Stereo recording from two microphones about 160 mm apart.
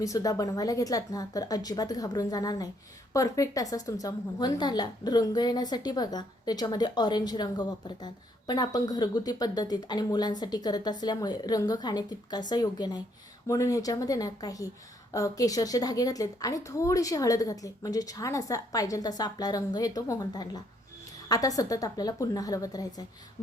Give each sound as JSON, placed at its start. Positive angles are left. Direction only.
{"t": 0.0, "sound": "a woman's voice", "side_deg": 20}